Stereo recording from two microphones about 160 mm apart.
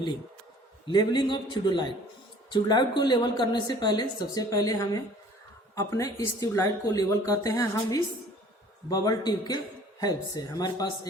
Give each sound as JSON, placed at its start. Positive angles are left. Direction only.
{"t": 0.9, "sound": "a woman's voice", "side_deg": 30}